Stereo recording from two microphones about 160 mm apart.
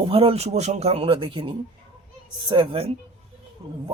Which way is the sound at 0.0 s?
35° right (ahead or behind).